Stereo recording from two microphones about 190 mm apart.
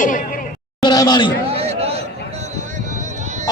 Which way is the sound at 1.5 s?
30° right (ahead or behind).